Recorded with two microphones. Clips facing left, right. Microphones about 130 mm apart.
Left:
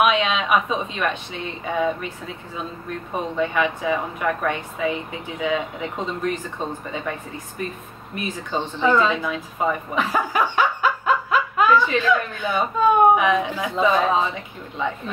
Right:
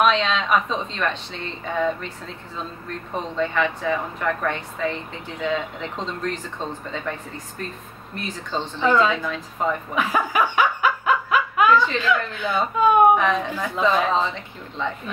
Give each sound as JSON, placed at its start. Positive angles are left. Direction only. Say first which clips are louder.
{"t": 0.0, "sound": "speech", "louder": "even", "side_deg": 10}
{"t": 9.9, "sound": "a sound", "louder": "right 1 dB", "side_deg": -15}
{"t": 11.1, "sound": "snicker", "louder": "even", "side_deg": -10}
{"t": 11.7, "sound": "speech", "louder": "left 1 dB", "side_deg": 10}